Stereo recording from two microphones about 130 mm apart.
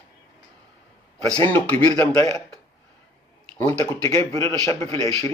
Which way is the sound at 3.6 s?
10° left (ahead or behind).